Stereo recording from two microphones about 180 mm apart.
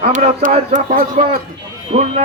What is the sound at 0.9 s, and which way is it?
Speech, 55° right (ahead or behind).